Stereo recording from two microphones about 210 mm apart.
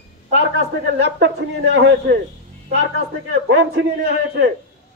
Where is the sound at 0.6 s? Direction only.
50° right (ahead or behind).